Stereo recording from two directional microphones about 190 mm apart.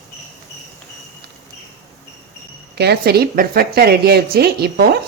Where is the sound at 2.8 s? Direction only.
60° right (ahead or behind).